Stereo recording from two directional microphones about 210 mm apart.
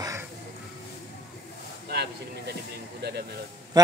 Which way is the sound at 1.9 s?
50° right (ahead or behind).